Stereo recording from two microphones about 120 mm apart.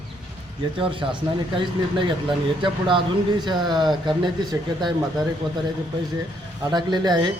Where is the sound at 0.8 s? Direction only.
50° right (ahead or behind).